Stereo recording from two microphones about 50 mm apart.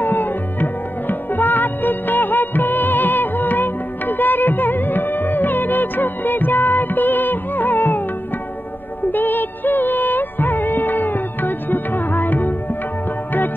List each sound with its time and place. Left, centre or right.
0.0 s music: left
9.1 s music: left